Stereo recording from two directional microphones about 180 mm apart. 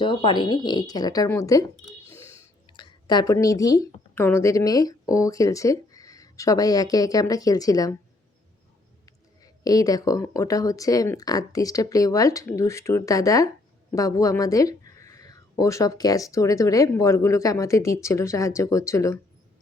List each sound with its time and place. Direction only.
0.0 s speech: 25° left (ahead or behind)
2.0 s a sound: 15° left (ahead or behind)
3.3 s speech: 20° left (ahead or behind)
9.4 s speech: 20° left (ahead or behind)